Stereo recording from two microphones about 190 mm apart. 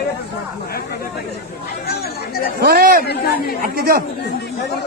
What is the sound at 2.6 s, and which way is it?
Chatter, 55° right (ahead or behind).